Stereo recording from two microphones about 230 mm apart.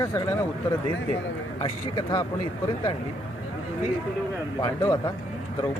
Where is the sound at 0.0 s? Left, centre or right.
Centre.